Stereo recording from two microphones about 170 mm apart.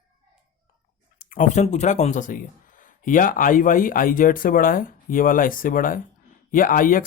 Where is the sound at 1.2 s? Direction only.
50° left (ahead or behind).